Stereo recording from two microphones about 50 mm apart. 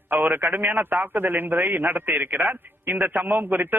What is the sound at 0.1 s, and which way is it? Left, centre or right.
Speech, right.